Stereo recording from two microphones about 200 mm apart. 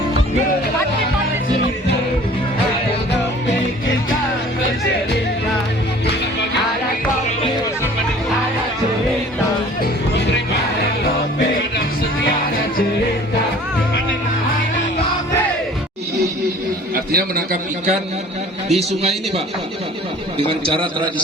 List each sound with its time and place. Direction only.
16.9 s a sound: 45° right (ahead or behind)
18.7 s a man's voice: 30° right (ahead or behind)
20.5 s a man's voice: 25° right (ahead or behind)